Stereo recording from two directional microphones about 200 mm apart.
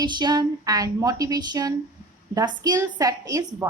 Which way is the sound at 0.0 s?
20° right (ahead or behind).